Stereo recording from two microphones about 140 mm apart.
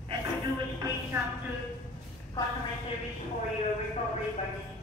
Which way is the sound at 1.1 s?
20° right (ahead or behind).